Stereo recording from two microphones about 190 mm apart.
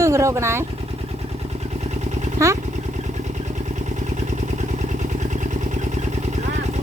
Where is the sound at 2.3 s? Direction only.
15° right (ahead or behind).